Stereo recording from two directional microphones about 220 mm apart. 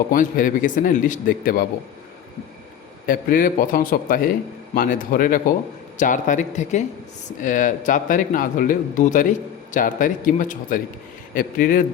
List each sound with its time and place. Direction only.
0.1 s a man's voice: 40° left (ahead or behind)
3.1 s a man's voice: 40° left (ahead or behind)